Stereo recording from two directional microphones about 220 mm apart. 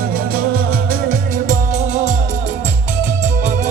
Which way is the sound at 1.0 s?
35° right (ahead or behind).